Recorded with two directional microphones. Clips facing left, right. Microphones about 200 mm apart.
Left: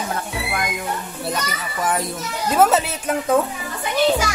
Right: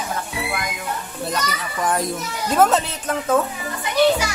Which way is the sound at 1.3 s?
Centre (ahead or behind).